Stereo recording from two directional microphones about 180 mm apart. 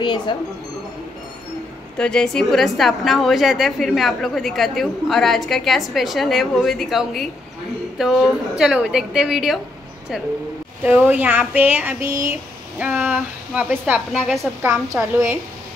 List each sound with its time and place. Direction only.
0.0 s speech: 25° left (ahead or behind)
2.0 s a woman's voice: 5° left (ahead or behind)
10.8 s a woman's voice: 10° right (ahead or behind)
14.6 s speech: 15° right (ahead or behind)